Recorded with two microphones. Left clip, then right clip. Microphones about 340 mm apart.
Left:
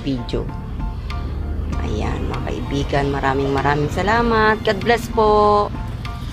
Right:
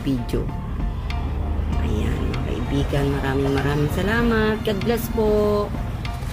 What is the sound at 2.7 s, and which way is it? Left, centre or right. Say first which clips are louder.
Speech: left 4 dB; centre.